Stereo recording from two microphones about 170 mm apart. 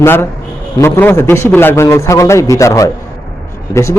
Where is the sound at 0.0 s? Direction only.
15° left (ahead or behind).